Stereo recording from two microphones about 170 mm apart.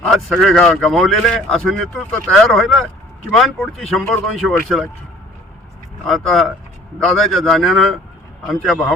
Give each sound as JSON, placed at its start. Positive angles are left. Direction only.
{"t": 0.1, "sound": "a man's voice", "side_deg": 0}
{"t": 6.1, "sound": "a man's voice", "side_deg": 0}